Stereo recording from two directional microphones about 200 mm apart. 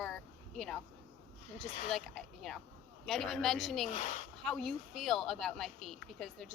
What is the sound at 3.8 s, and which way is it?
Speech, 35° left (ahead or behind).